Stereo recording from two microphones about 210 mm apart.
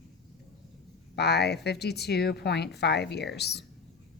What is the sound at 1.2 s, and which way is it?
Speech, 50° left (ahead or behind).